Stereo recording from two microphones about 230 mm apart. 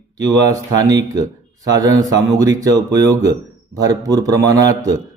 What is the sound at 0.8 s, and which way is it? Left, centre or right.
Speech, centre.